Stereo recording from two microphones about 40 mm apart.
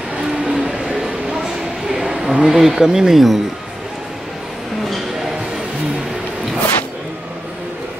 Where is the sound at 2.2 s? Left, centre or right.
Centre.